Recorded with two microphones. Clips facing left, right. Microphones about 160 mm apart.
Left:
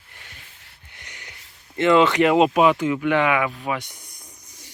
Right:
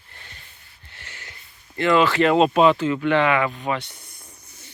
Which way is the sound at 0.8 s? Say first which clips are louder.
Right 1 dB; 15° left (ahead or behind).